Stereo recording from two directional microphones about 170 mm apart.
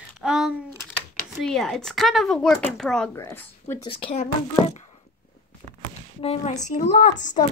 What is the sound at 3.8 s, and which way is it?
Speech, 30° left (ahead or behind).